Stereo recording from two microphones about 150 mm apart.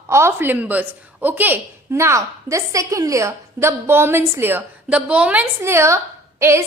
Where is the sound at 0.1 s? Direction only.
15° right (ahead or behind).